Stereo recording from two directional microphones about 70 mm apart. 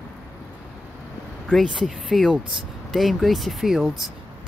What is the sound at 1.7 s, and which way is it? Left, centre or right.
Speech, centre.